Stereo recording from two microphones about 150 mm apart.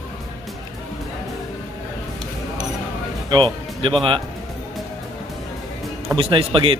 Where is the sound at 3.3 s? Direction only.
30° right (ahead or behind).